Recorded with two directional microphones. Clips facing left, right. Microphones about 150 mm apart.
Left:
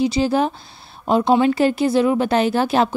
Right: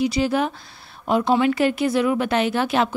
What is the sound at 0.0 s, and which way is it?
Speech, 30° left (ahead or behind).